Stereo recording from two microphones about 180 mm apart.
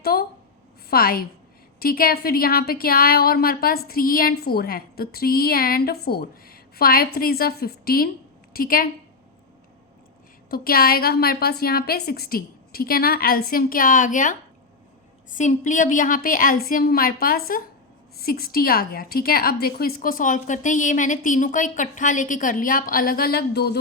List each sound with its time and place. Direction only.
0.0 s a woman's voice: 60° left (ahead or behind)
10.5 s a woman's voice: 55° left (ahead or behind)